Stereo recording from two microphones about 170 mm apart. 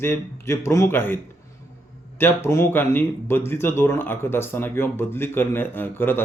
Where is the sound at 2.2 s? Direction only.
15° left (ahead or behind).